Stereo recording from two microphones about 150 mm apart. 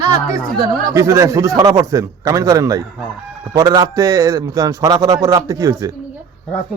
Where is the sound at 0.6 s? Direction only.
20° right (ahead or behind).